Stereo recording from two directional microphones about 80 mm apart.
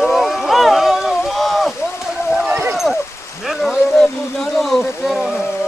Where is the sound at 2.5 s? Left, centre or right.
Right.